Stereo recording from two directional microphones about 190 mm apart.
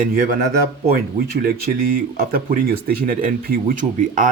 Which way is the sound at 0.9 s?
50° right (ahead or behind).